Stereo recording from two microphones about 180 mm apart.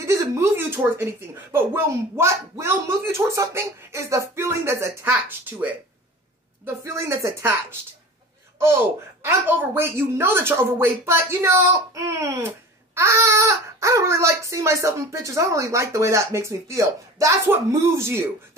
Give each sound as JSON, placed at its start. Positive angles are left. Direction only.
{"t": 0.0, "sound": "a woman's voice", "side_deg": -15}
{"t": 6.6, "sound": "a woman's voice", "side_deg": -15}
{"t": 9.2, "sound": "a woman's voice", "side_deg": -15}